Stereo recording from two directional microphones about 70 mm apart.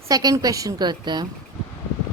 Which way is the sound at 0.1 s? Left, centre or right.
Right.